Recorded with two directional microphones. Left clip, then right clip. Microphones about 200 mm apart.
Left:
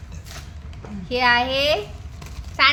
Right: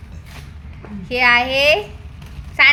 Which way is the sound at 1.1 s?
15° right (ahead or behind).